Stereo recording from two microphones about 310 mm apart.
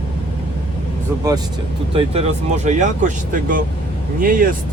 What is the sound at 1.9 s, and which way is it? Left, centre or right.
Speech, centre.